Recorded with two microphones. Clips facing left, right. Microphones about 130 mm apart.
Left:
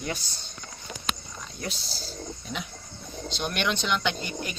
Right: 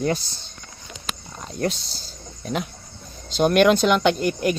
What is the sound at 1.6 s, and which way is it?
Speech, 50° right (ahead or behind).